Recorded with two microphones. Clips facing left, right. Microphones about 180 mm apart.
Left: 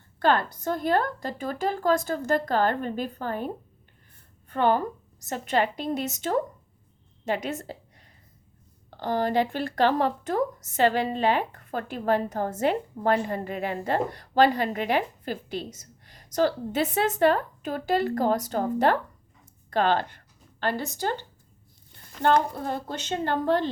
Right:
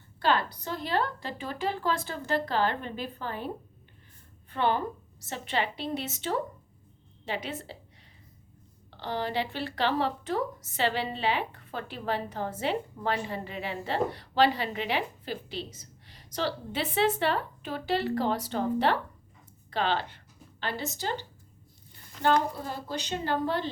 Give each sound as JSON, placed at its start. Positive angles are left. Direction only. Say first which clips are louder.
{"t": 0.2, "sound": "a woman's voice", "louder": "left 4 dB", "side_deg": 50}
{"t": 8.9, "sound": "speech", "louder": "left 6 dB", "side_deg": 45}
{"t": 19.7, "sound": "a sound", "louder": "left 5 dB", "side_deg": 50}
{"t": 21.0, "sound": "speech", "louder": "left 4 dB", "side_deg": 55}